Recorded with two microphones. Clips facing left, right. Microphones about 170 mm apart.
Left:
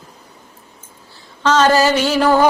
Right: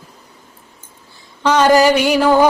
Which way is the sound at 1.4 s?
15° right (ahead or behind).